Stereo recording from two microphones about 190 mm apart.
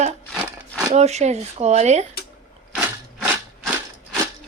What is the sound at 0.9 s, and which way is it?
Speech, 35° right (ahead or behind).